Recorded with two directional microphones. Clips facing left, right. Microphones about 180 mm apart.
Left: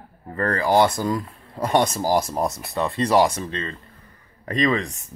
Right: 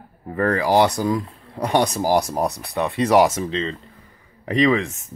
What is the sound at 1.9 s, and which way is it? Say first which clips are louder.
Speech: right 2 dB; 15° right (ahead or behind).